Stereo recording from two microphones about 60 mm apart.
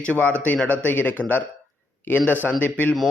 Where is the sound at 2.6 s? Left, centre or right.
Left.